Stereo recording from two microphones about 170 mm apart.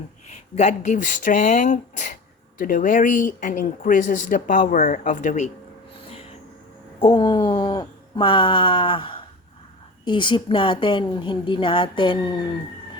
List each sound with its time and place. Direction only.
0.5 s speech: 45° left (ahead or behind)
7.0 s a sound: 30° left (ahead or behind)
10.0 s a woman's voice: 30° left (ahead or behind)